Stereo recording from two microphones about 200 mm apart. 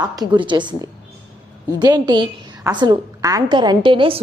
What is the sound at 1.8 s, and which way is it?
A woman's voice, 20° right (ahead or behind).